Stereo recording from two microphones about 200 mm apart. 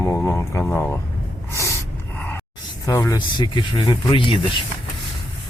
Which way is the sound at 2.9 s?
15° left (ahead or behind).